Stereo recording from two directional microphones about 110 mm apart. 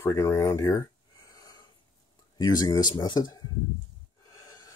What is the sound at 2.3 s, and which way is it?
Speech, 35° left (ahead or behind).